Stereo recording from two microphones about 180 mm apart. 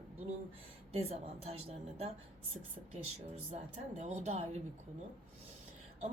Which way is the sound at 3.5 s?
35° right (ahead or behind).